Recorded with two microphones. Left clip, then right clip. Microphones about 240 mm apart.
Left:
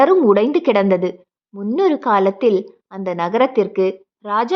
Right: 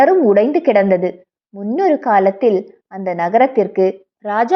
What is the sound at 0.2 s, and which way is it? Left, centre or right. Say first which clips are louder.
A woman's voice: right 2 dB; centre.